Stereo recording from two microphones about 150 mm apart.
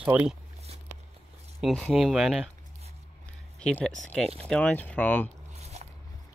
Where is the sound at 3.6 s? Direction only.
5° left (ahead or behind).